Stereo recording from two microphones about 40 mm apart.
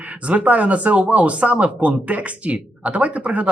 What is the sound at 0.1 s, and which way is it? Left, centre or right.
Speech, right.